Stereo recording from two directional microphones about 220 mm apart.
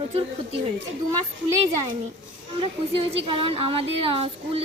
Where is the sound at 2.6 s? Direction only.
25° right (ahead or behind).